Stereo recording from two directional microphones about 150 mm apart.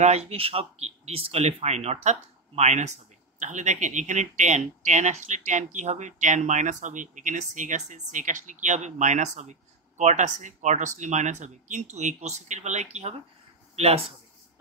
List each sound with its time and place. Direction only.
0.0 s speech: 45° right (ahead or behind)